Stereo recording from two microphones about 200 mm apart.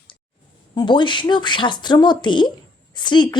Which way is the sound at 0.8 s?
25° left (ahead or behind).